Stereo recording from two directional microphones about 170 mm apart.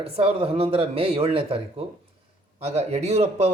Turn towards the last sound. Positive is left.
turn(degrees=-40)  # may be behind; listen again after turning